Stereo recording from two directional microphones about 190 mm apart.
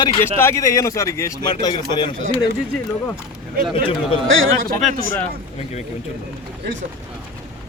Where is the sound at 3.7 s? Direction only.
30° left (ahead or behind).